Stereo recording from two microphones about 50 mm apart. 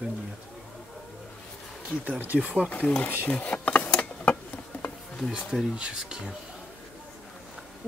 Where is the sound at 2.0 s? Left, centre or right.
Right.